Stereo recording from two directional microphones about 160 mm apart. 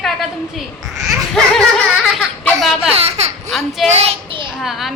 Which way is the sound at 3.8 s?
40° right (ahead or behind).